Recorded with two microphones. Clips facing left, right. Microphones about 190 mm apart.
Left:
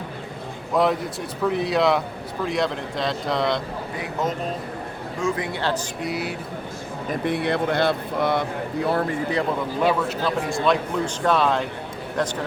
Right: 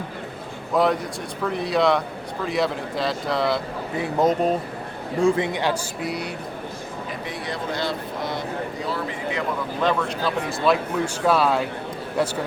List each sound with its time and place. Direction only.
0.7 s a man's voice: centre (ahead or behind)
4.0 s speech: 35° right (ahead or behind)
5.2 s a man's voice: 20° right (ahead or behind)
6.0 s speech: centre (ahead or behind)
7.3 s speech: 60° left (ahead or behind)
9.8 s speech: centre (ahead or behind)